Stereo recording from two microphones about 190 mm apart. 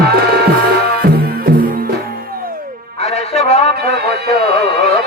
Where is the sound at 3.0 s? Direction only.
35° left (ahead or behind).